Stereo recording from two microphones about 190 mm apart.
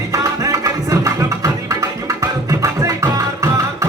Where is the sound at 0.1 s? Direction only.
15° right (ahead or behind).